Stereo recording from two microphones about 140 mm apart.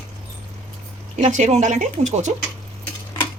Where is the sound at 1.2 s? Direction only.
60° right (ahead or behind).